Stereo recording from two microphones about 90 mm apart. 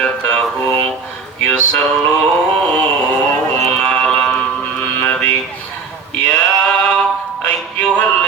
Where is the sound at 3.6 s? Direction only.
10° left (ahead or behind).